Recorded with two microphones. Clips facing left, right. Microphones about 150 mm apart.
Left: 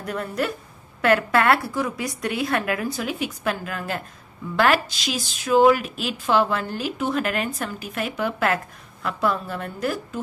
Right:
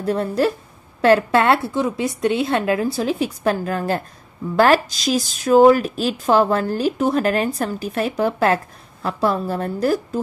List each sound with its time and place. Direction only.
0.0 s a woman's voice: 30° right (ahead or behind)